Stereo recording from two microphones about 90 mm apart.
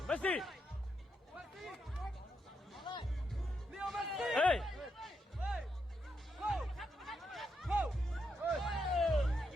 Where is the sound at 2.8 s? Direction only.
65° left (ahead or behind).